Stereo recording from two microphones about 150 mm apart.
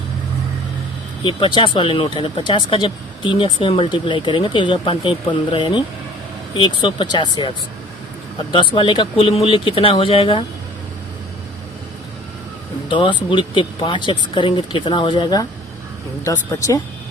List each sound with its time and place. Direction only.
1.2 s speech: 35° left (ahead or behind)
8.5 s speech: 35° left (ahead or behind)
12.9 s speech: 35° left (ahead or behind)